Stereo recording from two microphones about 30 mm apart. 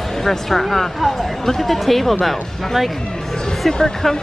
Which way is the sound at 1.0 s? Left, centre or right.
Centre.